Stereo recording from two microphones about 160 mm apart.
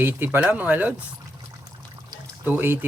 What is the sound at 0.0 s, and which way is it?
Speech, 15° right (ahead or behind).